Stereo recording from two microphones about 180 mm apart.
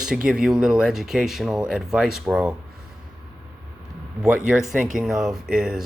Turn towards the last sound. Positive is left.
turn(degrees=-5)  # may be behind; listen again after turning